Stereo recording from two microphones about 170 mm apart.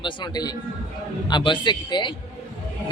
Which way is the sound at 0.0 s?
25° left (ahead or behind).